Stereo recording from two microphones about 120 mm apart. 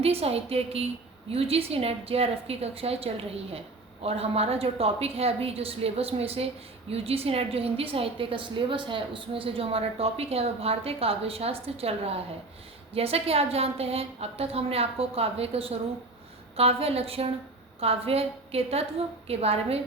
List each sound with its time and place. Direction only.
0.0 s a woman's voice: 55° right (ahead or behind)